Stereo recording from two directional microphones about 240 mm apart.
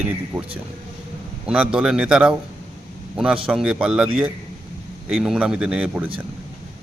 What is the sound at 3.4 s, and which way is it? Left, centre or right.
Speech, centre.